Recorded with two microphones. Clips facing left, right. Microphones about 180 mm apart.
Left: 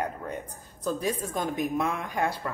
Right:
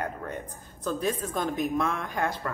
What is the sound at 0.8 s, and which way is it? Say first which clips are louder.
A woman's voice: even; 10° left (ahead or behind).